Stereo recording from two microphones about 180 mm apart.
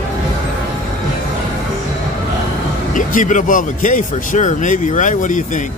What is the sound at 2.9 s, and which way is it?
Speech, 45° left (ahead or behind).